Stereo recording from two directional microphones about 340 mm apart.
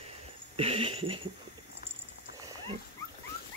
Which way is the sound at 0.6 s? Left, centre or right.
Centre.